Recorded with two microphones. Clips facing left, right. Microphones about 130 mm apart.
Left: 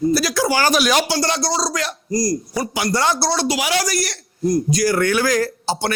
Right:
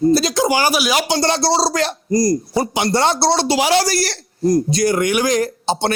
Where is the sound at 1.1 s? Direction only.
25° right (ahead or behind).